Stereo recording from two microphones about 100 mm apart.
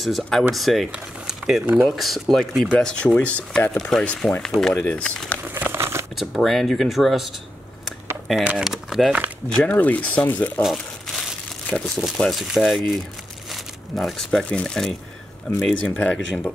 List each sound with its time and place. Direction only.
0.0 s speech: centre (ahead or behind)
5.4 s crumpling: 20° right (ahead or behind)
6.1 s speech: centre (ahead or behind)
8.5 s speech: 5° right (ahead or behind)
9.6 s speech: 15° left (ahead or behind)
10.6 s crumpling: centre (ahead or behind)
12.2 s speech: centre (ahead or behind)